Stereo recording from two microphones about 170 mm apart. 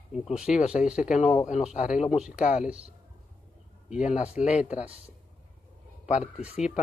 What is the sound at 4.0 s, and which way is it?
Speech, 45° left (ahead or behind).